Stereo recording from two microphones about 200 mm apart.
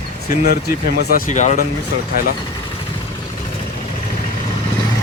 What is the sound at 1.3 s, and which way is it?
Speech, 35° left (ahead or behind).